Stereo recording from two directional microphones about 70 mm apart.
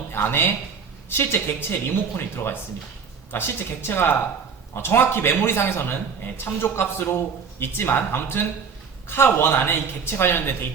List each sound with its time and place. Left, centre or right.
0.1 s a man's voice: left